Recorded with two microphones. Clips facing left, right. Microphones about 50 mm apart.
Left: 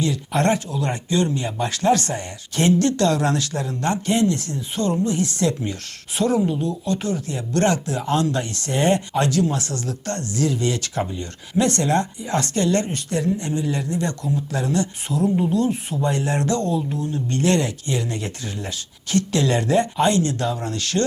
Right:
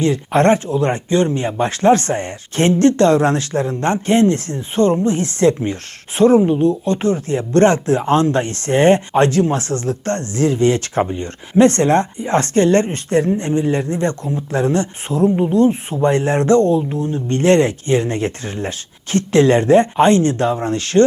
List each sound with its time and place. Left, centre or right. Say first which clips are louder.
0.0 s speech: right 7 dB; right